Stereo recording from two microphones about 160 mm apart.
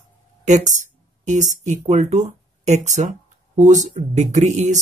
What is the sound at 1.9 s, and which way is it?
Speech, 45° right (ahead or behind).